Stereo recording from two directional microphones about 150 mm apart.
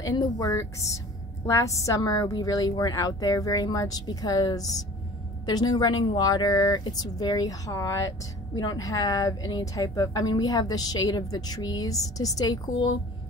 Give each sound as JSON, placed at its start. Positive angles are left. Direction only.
{"t": 0.0, "sound": "a woman's voice", "side_deg": 25}